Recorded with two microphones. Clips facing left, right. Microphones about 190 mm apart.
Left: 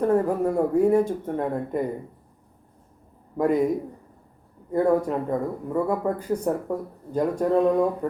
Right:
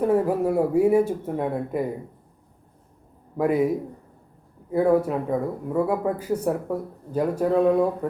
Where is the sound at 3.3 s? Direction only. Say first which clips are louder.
Even; 5° right (ahead or behind).